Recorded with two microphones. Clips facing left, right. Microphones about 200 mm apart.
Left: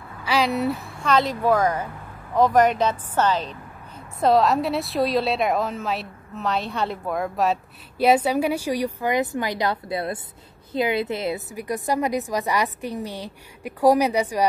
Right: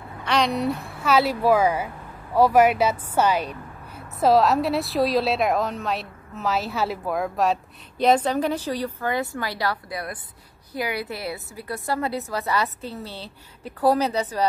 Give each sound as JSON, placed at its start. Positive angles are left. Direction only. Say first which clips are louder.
{"t": 0.2, "sound": "a woman's voice", "louder": "left 1 dB", "side_deg": 5}